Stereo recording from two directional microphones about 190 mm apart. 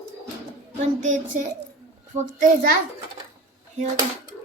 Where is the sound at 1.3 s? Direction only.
40° right (ahead or behind).